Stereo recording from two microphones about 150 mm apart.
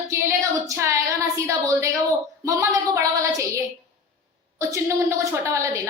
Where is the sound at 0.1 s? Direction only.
15° right (ahead or behind).